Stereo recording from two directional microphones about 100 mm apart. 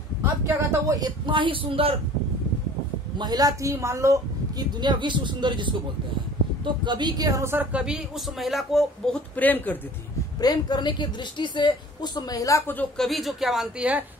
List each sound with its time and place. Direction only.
0.2 s speech: 30° right (ahead or behind)
1.2 s speech: 55° right (ahead or behind)
3.2 s speech: 40° right (ahead or behind)
4.7 s speech: 50° right (ahead or behind)
7.5 s speech: 10° right (ahead or behind)
9.4 s speech: 15° left (ahead or behind)
10.4 s a woman's voice: 45° left (ahead or behind)
12.9 s speech: centre (ahead or behind)